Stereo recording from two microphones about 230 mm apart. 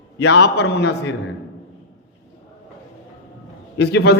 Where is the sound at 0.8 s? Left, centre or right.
Left.